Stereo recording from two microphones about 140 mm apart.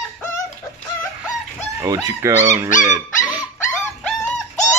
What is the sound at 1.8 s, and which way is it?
Speech, 20° right (ahead or behind).